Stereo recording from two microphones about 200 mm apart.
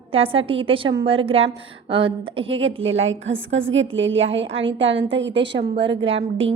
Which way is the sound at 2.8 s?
75° right (ahead or behind).